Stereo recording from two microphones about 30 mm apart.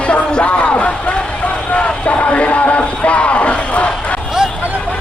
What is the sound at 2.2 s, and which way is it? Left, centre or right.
Music, left.